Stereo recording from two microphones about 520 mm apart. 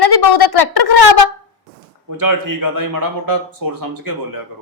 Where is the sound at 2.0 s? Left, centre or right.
Right.